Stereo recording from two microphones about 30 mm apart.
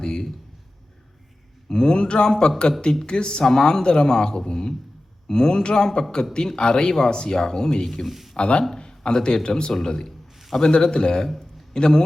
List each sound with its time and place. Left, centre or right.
0.0 s a sound: left
1.7 s speech: left
8.0 s speech: centre
8.4 s a man's voice: left
8.7 s a man's voice: left